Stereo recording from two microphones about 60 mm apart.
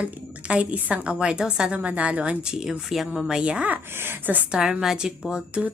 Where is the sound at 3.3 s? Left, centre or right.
Centre.